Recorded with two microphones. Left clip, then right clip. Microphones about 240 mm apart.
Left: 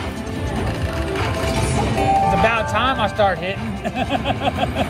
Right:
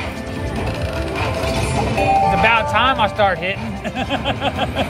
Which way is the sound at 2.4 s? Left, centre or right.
Centre.